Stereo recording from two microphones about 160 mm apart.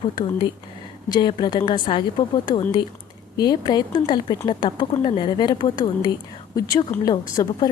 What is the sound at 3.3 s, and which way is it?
A woman's voice, 25° left (ahead or behind).